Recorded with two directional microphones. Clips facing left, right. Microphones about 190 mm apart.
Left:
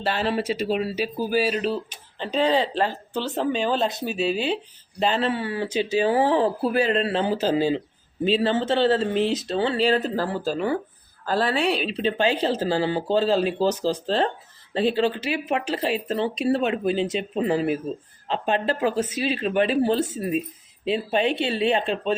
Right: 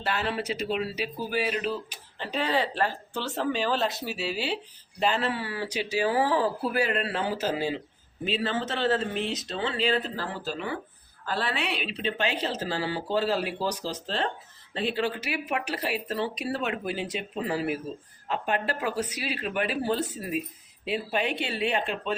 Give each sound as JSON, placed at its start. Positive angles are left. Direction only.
{"t": 0.0, "sound": "a woman's voice", "side_deg": 30}